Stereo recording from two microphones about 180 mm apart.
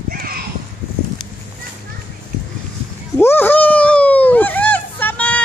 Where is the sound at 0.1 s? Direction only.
55° right (ahead or behind).